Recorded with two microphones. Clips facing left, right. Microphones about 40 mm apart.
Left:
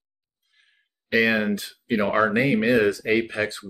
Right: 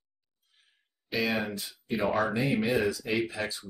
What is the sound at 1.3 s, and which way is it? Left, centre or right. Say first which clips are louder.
Speech: left 8 dB; left.